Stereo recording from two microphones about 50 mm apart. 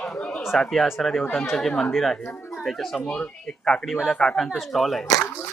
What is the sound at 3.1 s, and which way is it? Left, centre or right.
Speech, left.